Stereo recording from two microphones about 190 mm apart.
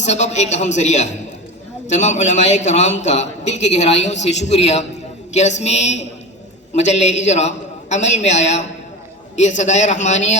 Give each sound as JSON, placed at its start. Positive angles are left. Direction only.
{"t": 0.0, "sound": "a man's voice", "side_deg": 35}